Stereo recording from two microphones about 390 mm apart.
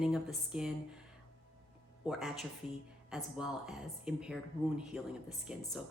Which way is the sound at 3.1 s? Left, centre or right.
Centre.